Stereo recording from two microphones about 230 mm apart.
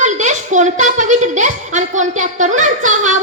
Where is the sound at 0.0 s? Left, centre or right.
Right.